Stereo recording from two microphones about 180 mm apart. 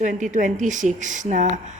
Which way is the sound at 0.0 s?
45° right (ahead or behind).